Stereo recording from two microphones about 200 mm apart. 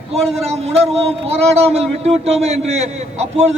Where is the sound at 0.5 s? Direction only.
30° right (ahead or behind).